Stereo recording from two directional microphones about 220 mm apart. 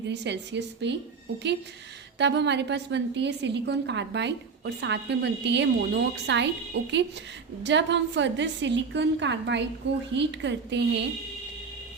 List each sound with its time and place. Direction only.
0.1 s a woman's voice: 50° right (ahead or behind)
2.1 s a woman's voice: 50° right (ahead or behind)